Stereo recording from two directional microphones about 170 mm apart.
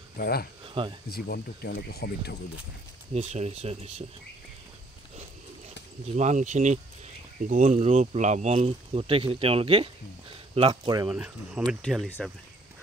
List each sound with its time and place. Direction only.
0.2 s speech: 65° left (ahead or behind)
3.2 s speech: 40° right (ahead or behind)
6.1 s speech: 45° right (ahead or behind); by 11.1 s 25° right (ahead or behind)
11.1 s speech: 5° right (ahead or behind)